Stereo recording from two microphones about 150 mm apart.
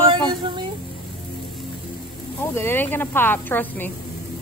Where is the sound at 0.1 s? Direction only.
30° right (ahead or behind).